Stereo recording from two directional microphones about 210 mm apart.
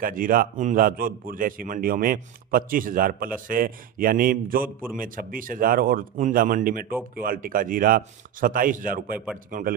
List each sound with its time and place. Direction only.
0.0 s a man's voice: 40° right (ahead or behind)